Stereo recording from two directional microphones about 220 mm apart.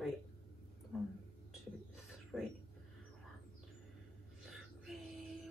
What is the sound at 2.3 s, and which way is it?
Speech, centre (ahead or behind).